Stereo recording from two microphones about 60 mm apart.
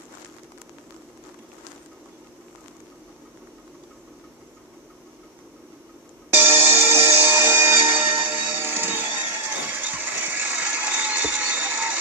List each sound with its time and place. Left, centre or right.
6.3 s music: right